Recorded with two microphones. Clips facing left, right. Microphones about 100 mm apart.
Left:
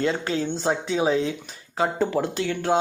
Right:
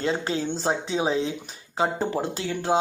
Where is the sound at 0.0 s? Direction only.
30° right (ahead or behind).